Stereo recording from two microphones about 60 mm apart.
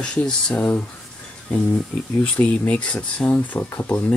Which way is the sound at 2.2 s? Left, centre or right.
Left.